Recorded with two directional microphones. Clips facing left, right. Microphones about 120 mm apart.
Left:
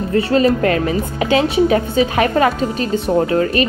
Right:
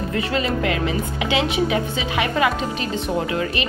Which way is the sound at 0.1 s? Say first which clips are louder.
Left 10 dB; 35° left (ahead or behind).